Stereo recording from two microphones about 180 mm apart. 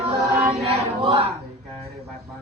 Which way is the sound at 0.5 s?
35° right (ahead or behind).